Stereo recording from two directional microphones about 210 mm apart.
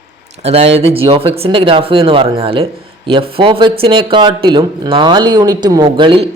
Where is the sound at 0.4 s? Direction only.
30° right (ahead or behind).